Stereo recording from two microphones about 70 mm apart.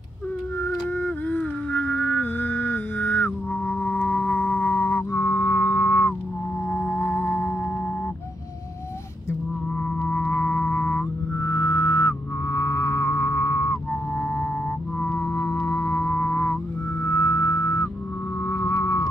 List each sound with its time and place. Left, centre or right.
0.6 s a sound: left
6.7 s music: left
10.0 s music: left
14.1 s music: centre
15.0 s music: left
15.6 s music: left